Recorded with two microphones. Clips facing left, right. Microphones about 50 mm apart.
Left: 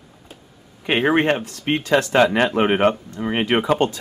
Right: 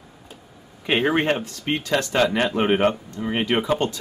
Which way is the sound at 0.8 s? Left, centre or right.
Centre.